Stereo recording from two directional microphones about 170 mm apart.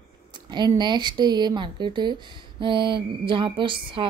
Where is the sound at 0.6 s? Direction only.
25° right (ahead or behind).